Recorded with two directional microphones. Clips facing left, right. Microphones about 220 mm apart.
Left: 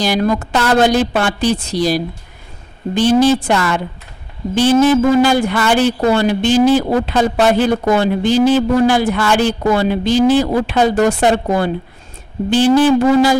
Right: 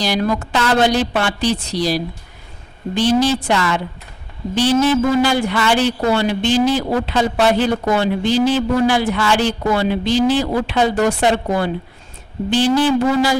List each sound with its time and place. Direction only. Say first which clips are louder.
0.0 s speech: left 3 dB; 50° left (ahead or behind)